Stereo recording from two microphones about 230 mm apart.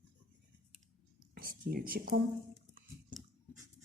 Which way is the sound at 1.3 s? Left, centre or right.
Right.